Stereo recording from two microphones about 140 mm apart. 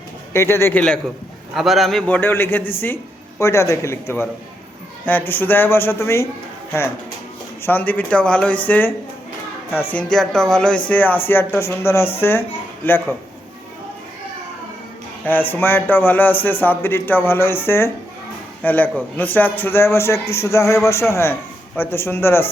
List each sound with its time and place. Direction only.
0.3 s a man's voice: 15° left (ahead or behind)
1.5 s a man's voice: centre (ahead or behind); by 6.2 s 20° left (ahead or behind)
7.6 s a man's voice: 15° left (ahead or behind)
9.9 s a man's voice: 5° left (ahead or behind)
15.2 s a man's voice: 15° left (ahead or behind)